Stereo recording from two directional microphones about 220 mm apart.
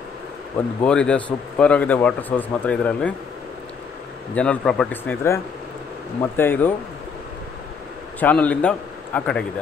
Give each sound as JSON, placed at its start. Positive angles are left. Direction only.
{"t": 0.8, "sound": "speech", "side_deg": 5}
{"t": 4.4, "sound": "speech", "side_deg": 5}
{"t": 8.2, "sound": "a man's voice", "side_deg": 5}